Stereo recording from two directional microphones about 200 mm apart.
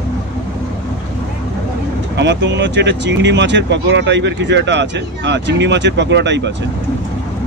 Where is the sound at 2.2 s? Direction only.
60° right (ahead or behind).